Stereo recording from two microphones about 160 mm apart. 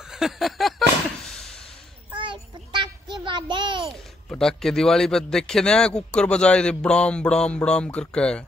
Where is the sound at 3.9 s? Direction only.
5° left (ahead or behind).